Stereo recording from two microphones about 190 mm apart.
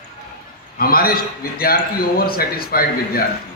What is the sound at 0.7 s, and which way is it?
A man's voice, 50° left (ahead or behind).